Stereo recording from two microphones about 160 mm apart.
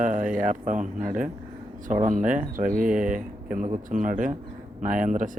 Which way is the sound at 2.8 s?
5° right (ahead or behind).